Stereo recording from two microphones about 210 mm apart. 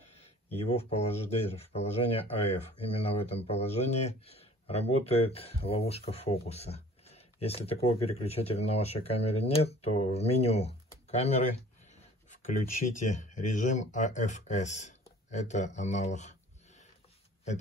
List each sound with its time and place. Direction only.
0.6 s speech: 30° left (ahead or behind)
12.4 s speech: 35° left (ahead or behind)